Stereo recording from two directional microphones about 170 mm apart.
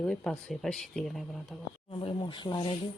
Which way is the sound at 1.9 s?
30° left (ahead or behind).